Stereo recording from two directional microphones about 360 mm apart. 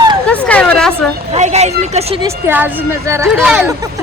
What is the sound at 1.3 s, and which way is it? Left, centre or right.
Speech, centre.